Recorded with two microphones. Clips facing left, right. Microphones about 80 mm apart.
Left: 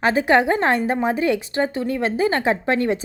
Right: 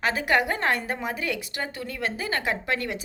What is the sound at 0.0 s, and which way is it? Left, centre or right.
A woman's voice, left.